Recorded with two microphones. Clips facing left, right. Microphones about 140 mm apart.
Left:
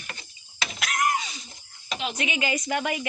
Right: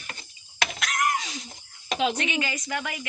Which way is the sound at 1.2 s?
90° right.